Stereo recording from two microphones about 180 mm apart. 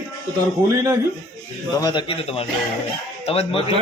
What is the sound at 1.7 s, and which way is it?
Speech, 25° left (ahead or behind).